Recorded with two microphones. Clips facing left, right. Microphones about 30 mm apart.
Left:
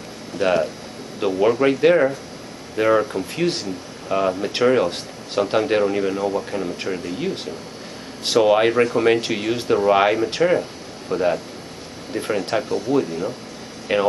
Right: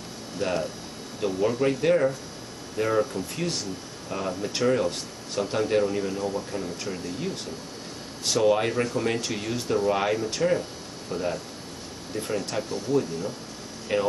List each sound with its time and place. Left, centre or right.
0.4 s speech: left
13.9 s speech: left